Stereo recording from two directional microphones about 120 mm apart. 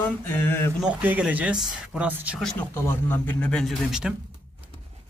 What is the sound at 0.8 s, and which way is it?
Speech, 10° right (ahead or behind).